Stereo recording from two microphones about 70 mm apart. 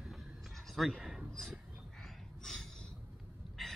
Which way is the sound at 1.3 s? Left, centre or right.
Centre.